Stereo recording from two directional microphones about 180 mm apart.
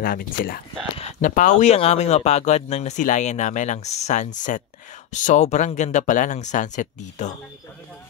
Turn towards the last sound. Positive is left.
turn(degrees=40)  # may be behind; listen again after turning